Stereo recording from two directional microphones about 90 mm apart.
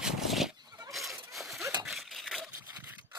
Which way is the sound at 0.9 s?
Centre (ahead or behind).